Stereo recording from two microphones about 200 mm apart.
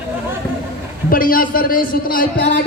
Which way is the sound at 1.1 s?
45° left (ahead or behind).